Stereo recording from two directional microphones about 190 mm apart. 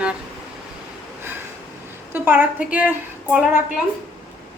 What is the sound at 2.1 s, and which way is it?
A woman's voice, 10° right (ahead or behind).